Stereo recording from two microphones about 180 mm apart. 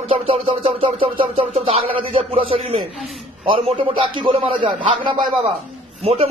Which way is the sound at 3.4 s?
30° right (ahead or behind).